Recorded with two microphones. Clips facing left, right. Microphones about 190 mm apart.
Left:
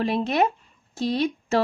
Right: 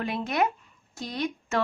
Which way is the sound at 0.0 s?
30° left (ahead or behind).